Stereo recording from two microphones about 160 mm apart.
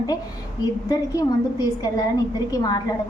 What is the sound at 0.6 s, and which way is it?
A woman's voice, 25° left (ahead or behind).